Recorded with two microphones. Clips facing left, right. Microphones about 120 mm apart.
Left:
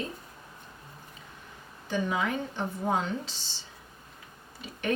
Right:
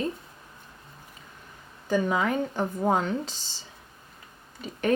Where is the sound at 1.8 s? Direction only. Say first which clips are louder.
Right 5 dB; 45° right (ahead or behind).